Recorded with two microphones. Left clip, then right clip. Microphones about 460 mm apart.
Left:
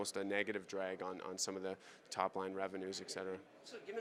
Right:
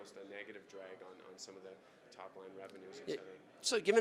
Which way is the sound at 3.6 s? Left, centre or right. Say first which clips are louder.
Right 16 dB; right.